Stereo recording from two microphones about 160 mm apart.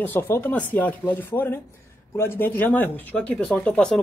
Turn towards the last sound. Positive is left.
turn(degrees=5)  # may be behind; listen again after turning